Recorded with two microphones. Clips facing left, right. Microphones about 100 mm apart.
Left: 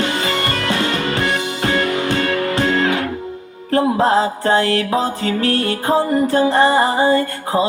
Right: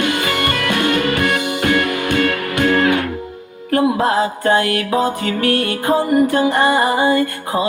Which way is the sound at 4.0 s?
25° left (ahead or behind).